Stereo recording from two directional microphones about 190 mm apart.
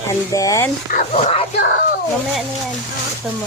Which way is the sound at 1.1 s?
30° left (ahead or behind).